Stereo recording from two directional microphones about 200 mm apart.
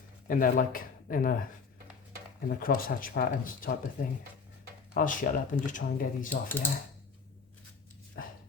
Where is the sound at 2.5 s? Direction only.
45° left (ahead or behind).